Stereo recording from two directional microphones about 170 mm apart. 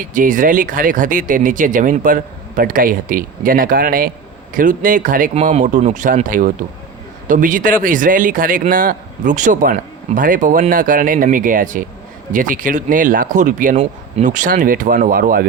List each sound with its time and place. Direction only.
0.0 s speech: 50° right (ahead or behind)